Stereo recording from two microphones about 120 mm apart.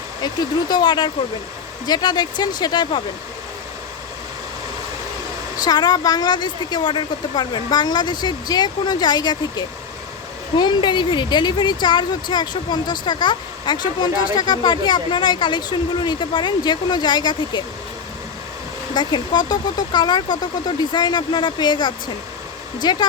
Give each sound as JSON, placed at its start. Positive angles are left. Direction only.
{"t": 0.2, "sound": "speech", "side_deg": 35}
{"t": 5.5, "sound": "speech", "side_deg": 35}
{"t": 18.9, "sound": "speech", "side_deg": 40}